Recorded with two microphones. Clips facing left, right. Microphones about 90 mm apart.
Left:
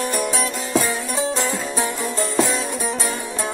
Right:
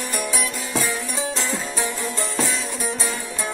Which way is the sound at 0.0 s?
25° left (ahead or behind).